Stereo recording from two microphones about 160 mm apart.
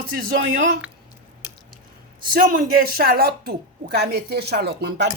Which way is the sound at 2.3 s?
65° right (ahead or behind).